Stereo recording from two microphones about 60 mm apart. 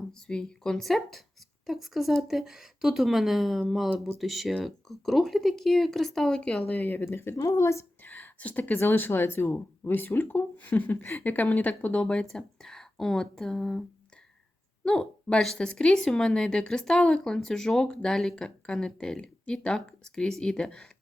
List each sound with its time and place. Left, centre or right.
0.1 s speech: centre
6.7 s speech: left
7.4 s speech: left
8.0 s a woman's voice: left
12.2 s speech: centre
14.8 s speech: centre